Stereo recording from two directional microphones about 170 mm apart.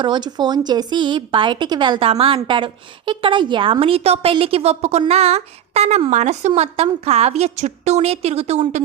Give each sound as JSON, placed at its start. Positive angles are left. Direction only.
{"t": 0.0, "sound": "speech", "side_deg": -25}